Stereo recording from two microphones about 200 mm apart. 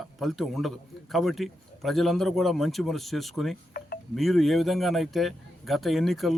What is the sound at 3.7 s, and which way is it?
Wind chime, 45° left (ahead or behind).